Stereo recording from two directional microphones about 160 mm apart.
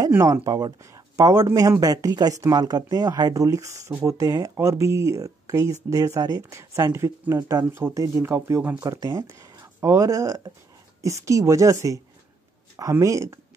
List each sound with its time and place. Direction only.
0.1 s speech: 20° right (ahead or behind)